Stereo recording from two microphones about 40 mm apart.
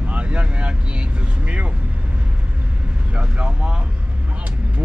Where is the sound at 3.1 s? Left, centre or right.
Right.